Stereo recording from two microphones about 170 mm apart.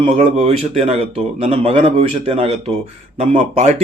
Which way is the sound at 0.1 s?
40° right (ahead or behind).